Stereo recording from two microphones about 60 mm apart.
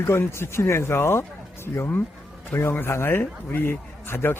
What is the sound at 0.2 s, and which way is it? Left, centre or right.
A man's voice, left.